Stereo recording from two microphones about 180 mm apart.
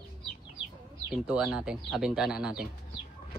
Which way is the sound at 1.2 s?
5° right (ahead or behind).